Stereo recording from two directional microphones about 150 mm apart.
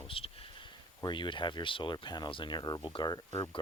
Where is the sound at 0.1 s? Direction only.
40° left (ahead or behind).